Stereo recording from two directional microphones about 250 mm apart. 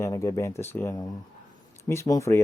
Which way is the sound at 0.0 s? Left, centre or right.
Centre.